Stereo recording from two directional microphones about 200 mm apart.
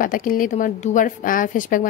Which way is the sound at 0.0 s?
45° left (ahead or behind).